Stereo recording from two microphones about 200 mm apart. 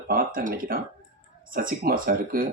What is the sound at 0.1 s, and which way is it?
Speech, 45° right (ahead or behind).